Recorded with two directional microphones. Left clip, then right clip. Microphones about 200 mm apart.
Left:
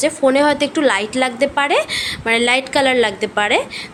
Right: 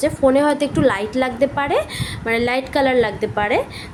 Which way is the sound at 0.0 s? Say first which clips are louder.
Left 1 dB; centre (ahead or behind).